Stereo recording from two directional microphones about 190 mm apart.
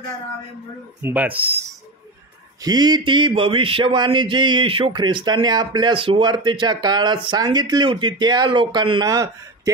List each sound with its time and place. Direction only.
1.0 s speech: 10° right (ahead or behind)
2.6 s speech: 20° right (ahead or behind)